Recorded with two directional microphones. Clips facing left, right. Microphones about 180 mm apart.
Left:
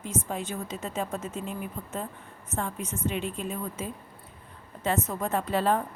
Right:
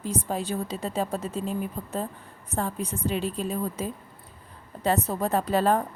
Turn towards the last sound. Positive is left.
turn(degrees=-40)  # may be behind; listen again after turning